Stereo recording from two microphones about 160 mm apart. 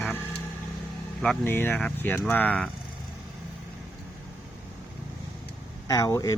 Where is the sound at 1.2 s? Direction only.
10° left (ahead or behind).